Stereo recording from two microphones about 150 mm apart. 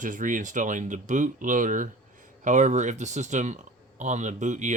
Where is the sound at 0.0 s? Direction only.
60° right (ahead or behind).